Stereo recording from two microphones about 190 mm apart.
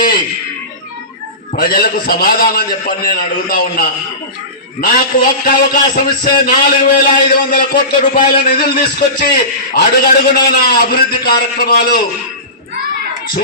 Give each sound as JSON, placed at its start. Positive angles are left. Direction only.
{"t": 1.5, "sound": "a man's voice", "side_deg": 50}